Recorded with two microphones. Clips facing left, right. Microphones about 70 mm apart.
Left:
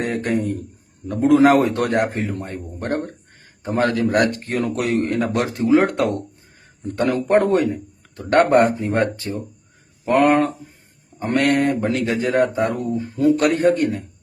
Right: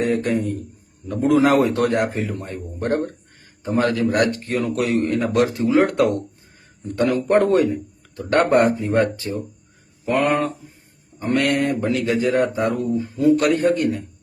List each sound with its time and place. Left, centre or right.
0.0 s speech: left
8.1 s speech: left